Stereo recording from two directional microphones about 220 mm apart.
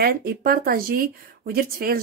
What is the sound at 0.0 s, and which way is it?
Speech, 45° right (ahead or behind).